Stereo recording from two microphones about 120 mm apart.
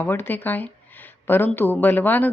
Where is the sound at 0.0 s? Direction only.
15° left (ahead or behind).